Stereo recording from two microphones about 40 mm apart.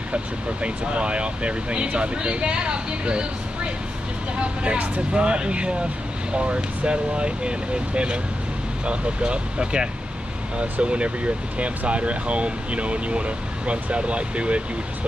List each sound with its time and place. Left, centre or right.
0.1 s speech: right